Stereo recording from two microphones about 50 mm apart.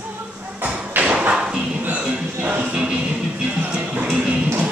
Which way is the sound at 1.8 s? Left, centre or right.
Right.